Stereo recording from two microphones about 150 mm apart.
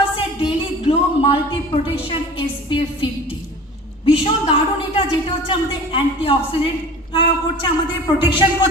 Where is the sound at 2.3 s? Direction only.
35° left (ahead or behind).